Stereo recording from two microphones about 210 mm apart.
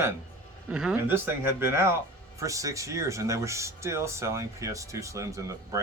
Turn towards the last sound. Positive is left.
turn(degrees=-15)  # may be behind; listen again after turning